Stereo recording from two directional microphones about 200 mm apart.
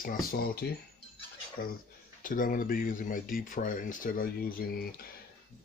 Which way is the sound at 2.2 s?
45° left (ahead or behind).